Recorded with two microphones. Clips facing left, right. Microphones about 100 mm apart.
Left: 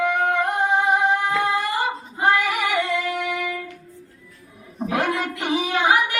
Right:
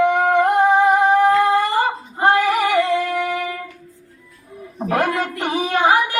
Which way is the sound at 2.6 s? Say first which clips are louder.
Right 6 dB; 40° right (ahead or behind).